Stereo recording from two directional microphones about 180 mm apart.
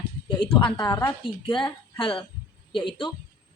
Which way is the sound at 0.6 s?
25° left (ahead or behind).